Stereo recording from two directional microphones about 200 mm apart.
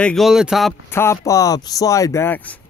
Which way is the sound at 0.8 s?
10° left (ahead or behind).